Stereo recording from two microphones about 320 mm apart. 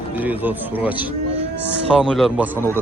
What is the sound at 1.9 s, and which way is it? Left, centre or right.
Speech, centre.